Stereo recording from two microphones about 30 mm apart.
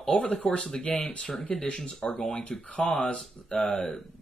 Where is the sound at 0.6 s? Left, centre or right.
Left.